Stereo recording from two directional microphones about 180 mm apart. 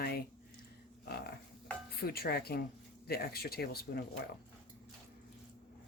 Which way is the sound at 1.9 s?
60° left (ahead or behind).